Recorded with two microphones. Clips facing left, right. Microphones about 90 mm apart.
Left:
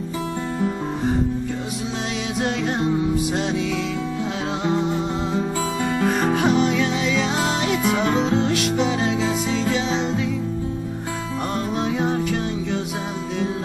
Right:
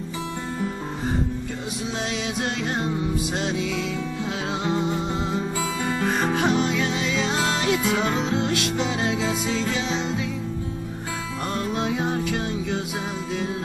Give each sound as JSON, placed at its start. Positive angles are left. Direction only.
{"t": 4.6, "sound": "music", "side_deg": 0}
{"t": 6.0, "sound": "music", "side_deg": 5}
{"t": 7.9, "sound": "music", "side_deg": 30}
{"t": 8.7, "sound": "music", "side_deg": 10}